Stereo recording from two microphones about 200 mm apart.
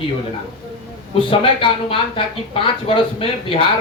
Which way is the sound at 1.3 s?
25° left (ahead or behind).